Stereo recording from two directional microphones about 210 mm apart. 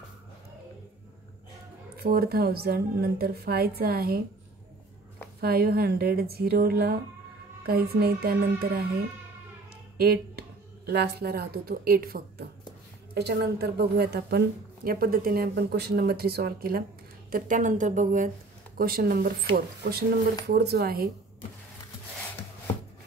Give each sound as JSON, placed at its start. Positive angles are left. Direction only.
{"t": 2.0, "sound": "a woman's voice", "side_deg": -45}
{"t": 5.4, "sound": "a woman's voice", "side_deg": -45}
{"t": 9.9, "sound": "a woman's voice", "side_deg": -45}